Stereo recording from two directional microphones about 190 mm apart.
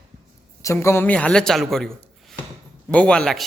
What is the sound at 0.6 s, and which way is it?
A man's voice, 15° left (ahead or behind).